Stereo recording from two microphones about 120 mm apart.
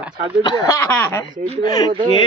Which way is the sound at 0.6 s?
20° left (ahead or behind).